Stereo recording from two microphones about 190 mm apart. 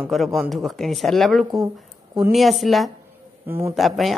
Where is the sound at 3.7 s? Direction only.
Centre (ahead or behind).